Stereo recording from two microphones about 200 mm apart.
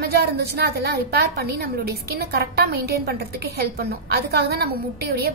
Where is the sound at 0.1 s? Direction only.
50° right (ahead or behind).